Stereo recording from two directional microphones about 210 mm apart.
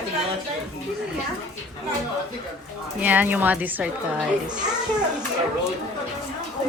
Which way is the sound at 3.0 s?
10° right (ahead or behind).